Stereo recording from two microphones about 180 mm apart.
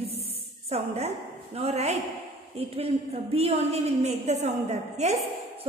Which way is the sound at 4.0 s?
40° right (ahead or behind).